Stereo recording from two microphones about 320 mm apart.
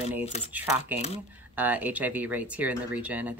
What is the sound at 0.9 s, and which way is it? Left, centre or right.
Speech, centre.